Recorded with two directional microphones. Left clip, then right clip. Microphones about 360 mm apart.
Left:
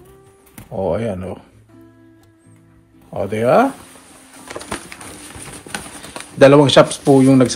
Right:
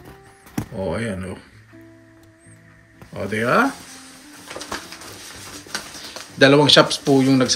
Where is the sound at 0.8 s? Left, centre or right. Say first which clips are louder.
Left 6 dB; centre.